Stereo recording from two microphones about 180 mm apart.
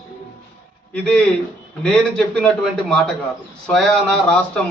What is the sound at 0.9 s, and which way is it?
A man's voice, 5° left (ahead or behind).